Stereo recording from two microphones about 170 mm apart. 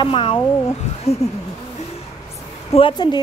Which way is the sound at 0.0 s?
30° left (ahead or behind).